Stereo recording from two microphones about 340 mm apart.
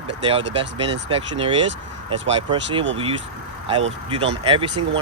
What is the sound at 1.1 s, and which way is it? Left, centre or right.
Speech, centre.